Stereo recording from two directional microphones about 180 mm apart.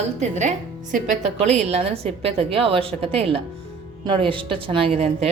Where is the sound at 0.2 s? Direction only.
40° right (ahead or behind).